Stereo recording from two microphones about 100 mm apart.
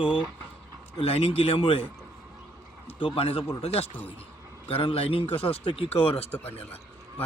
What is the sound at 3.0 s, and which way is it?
Speech, 70° left (ahead or behind).